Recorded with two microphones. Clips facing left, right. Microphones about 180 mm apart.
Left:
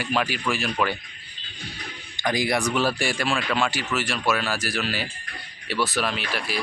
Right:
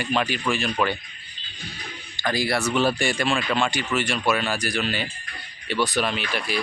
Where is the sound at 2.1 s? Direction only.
20° left (ahead or behind).